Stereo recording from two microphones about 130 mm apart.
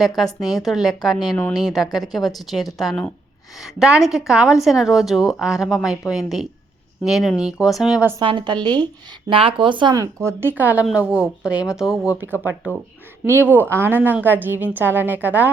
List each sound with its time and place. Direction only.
0.5 s speech: centre (ahead or behind)
8.2 s speech: 40° right (ahead or behind)
9.9 s speech: 25° right (ahead or behind)